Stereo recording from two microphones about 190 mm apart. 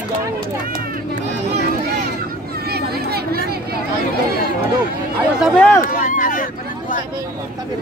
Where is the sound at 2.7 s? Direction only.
55° right (ahead or behind).